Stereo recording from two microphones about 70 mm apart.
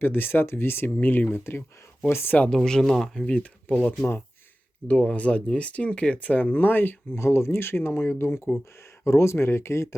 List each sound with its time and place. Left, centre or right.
0.0 s speech: left
2.5 s speech: centre
3.3 s speech: centre; by 9.9 s left